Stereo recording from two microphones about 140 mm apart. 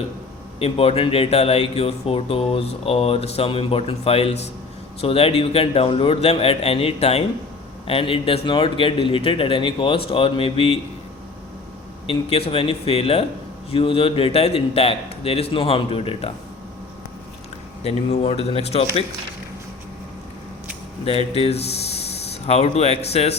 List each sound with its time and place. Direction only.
0.6 s a man's voice: 45° left (ahead or behind)
12.0 s speech: 45° left (ahead or behind)
17.8 s speech: 50° left (ahead or behind)
21.0 s speech: 45° left (ahead or behind)